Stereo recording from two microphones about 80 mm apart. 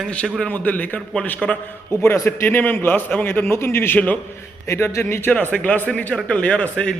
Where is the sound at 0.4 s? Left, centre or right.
Left.